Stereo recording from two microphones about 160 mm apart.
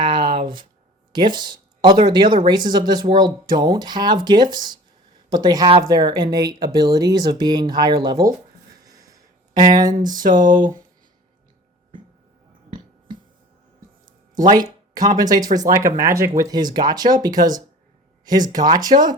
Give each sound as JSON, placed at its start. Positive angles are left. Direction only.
{"t": 0.0, "sound": "a sound", "side_deg": -30}
{"t": 1.1, "sound": "speech", "side_deg": -30}
{"t": 8.7, "sound": "a sound", "side_deg": -25}
{"t": 10.1, "sound": "speech", "side_deg": -25}
{"t": 10.4, "sound": "speech", "side_deg": -55}
{"t": 14.9, "sound": "speech", "side_deg": -25}